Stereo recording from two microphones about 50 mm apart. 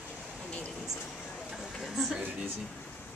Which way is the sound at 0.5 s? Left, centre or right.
Left.